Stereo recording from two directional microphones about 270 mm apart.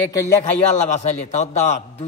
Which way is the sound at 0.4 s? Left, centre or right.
Left.